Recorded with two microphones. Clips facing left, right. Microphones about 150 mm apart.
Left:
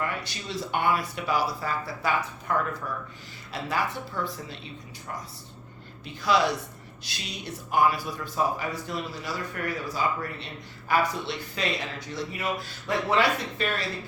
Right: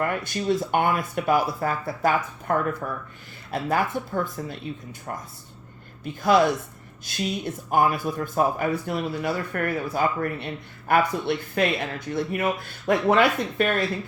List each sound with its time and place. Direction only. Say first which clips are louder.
0.0 s speech: right 7 dB; 50° right (ahead or behind)
6.2 s speech: right 5 dB; 50° right (ahead or behind)